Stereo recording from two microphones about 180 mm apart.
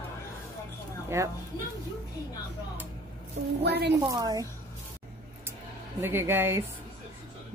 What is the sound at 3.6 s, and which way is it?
Speech, 70° right (ahead or behind).